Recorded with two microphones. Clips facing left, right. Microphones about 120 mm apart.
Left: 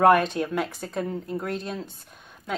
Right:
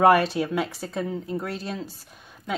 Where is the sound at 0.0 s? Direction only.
5° right (ahead or behind).